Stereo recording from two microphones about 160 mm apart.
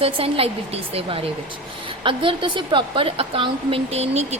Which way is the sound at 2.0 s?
30° right (ahead or behind).